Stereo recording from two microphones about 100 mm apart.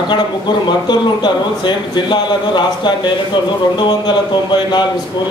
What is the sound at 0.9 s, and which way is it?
A man's voice, 50° left (ahead or behind).